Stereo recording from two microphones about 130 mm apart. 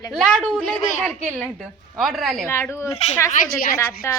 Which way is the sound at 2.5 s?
20° left (ahead or behind).